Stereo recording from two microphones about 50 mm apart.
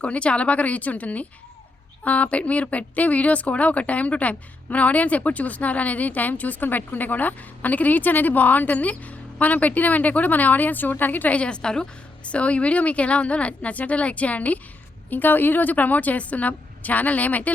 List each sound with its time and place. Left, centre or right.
0.0 s a woman's voice: left